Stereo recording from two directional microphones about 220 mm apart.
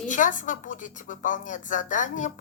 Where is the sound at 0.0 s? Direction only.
35° left (ahead or behind).